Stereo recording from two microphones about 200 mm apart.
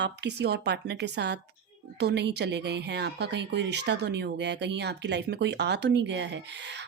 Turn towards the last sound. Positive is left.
turn(degrees=-60)  # may be behind; listen again after turning